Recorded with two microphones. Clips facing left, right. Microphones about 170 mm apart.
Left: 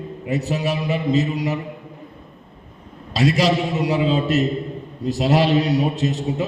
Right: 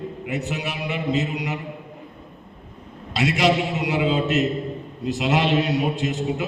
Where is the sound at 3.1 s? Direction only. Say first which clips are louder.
Left 2 dB; 35° left (ahead or behind).